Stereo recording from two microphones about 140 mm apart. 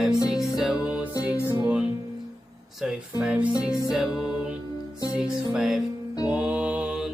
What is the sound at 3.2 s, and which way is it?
Music, 5° right (ahead or behind).